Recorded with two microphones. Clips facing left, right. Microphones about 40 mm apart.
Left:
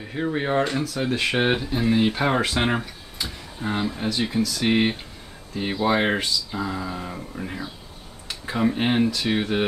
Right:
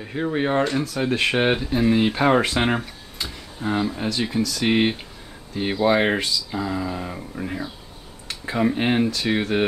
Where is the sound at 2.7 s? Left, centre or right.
Centre.